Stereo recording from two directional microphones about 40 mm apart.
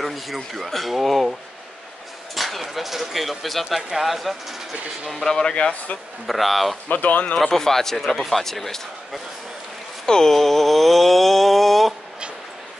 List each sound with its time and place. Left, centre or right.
0.0 s speech: centre
2.3 s speech: centre
5.1 s speech: centre
5.4 s speech: left
6.2 s speech: centre
6.9 s speech: left
7.3 s speech: centre
10.0 s a sound: centre